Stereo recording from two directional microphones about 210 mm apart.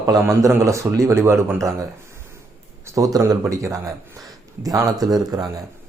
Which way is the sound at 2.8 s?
15° right (ahead or behind).